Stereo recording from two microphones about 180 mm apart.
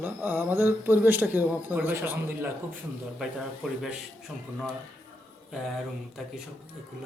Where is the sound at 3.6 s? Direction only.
Centre (ahead or behind).